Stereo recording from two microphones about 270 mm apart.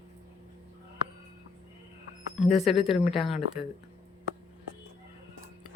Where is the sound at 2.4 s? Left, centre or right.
Centre.